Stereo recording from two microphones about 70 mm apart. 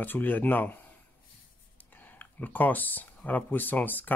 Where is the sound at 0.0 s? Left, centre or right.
Left.